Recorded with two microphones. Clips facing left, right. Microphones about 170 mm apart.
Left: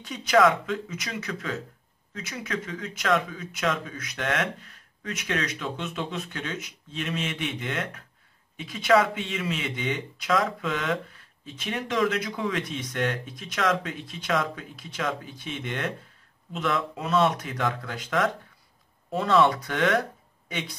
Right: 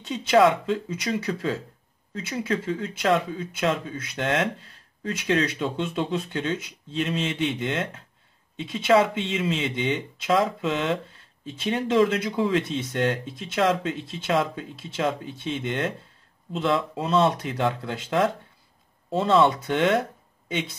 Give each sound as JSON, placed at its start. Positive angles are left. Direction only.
{"t": 0.0, "sound": "speech", "side_deg": -25}